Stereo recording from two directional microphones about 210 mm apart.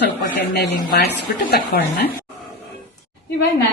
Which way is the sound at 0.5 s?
55° left (ahead or behind).